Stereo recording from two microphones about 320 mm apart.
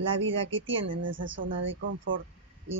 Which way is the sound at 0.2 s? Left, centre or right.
Right.